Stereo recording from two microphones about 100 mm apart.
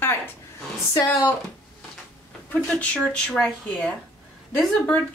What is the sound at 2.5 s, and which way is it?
Speech, 15° left (ahead or behind).